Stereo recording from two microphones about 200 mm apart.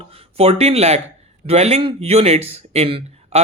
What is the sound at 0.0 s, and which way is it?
Speech, 30° right (ahead or behind).